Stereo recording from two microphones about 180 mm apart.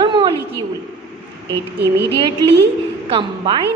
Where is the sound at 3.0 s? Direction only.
30° right (ahead or behind).